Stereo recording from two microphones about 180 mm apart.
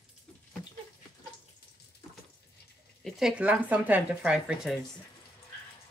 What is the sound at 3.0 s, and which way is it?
Speech, 5° right (ahead or behind).